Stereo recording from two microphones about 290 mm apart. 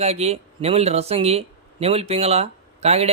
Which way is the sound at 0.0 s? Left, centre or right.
Right.